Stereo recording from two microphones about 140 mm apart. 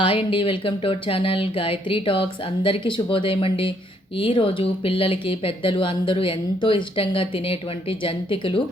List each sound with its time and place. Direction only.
0.0 s speech: 40° left (ahead or behind)